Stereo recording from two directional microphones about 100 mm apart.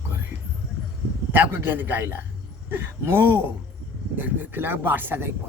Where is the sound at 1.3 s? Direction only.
20° right (ahead or behind).